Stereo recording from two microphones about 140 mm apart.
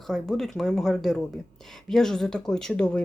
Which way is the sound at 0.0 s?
5° left (ahead or behind).